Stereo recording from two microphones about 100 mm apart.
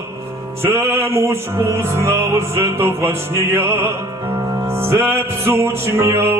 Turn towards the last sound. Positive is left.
turn(degrees=-25)  # may be behind; listen again after turning